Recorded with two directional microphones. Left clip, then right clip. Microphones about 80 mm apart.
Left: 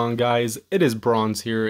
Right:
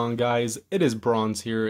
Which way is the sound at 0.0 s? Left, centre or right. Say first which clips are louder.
Left 3 dB; left.